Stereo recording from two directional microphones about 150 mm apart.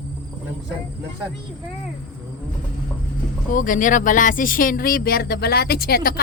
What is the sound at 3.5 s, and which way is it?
Speech, 60° left (ahead or behind).